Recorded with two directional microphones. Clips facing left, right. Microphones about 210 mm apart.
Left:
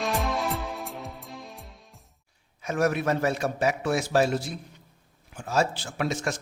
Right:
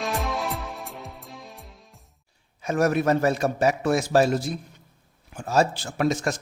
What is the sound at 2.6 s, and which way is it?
A man's voice, 40° right (ahead or behind).